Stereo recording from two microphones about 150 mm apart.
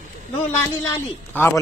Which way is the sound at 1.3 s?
15° left (ahead or behind).